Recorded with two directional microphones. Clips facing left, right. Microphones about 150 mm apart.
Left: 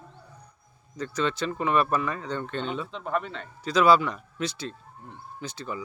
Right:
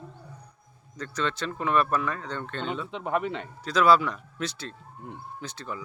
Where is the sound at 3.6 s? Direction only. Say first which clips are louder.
Left 1 dB; centre (ahead or behind).